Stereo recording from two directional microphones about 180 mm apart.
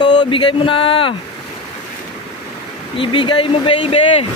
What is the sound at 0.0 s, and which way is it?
Speech, 25° left (ahead or behind).